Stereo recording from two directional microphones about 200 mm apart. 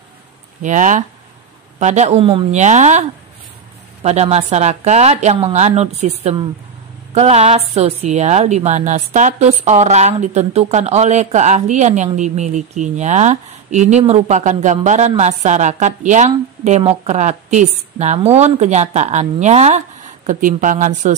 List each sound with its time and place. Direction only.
0.6 s a woman's voice: 40° right (ahead or behind)